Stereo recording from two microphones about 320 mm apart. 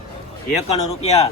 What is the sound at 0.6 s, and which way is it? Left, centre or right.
Speech, centre.